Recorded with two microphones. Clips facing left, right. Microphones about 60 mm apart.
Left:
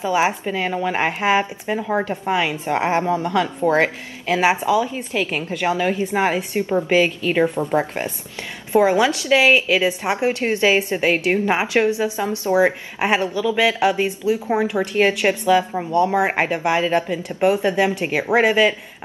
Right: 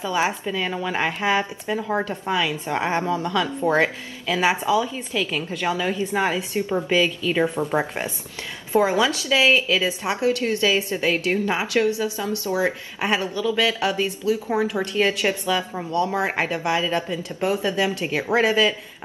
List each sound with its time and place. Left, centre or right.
0.0 s a woman's voice: left
1.8 s speech: centre
2.0 s a woman's voice: left
3.7 s speech: centre
4.3 s a woman's voice: left
7.7 s speech: centre
8.7 s a woman's voice: left